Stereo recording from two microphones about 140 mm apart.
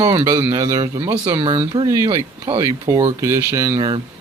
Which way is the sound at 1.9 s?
20° right (ahead or behind).